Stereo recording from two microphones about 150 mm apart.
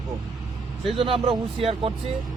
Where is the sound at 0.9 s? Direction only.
40° right (ahead or behind).